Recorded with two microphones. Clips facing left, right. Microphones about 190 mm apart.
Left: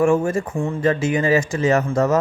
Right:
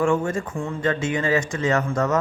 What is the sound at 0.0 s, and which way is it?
Speech, 25° left (ahead or behind).